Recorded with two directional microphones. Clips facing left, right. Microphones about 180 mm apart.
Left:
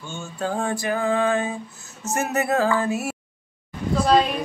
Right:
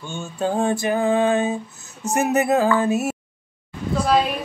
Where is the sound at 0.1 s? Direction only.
20° right (ahead or behind).